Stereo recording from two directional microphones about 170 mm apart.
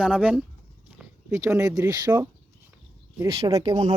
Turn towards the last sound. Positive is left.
turn(degrees=-25)  # may be behind; listen again after turning